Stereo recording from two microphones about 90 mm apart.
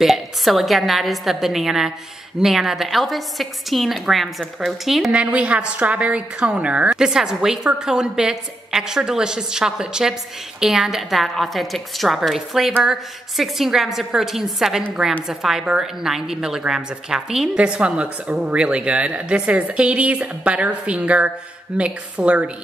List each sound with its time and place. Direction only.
0.0 s a woman's voice: centre (ahead or behind)
5.1 s a woman's voice: 15° right (ahead or behind)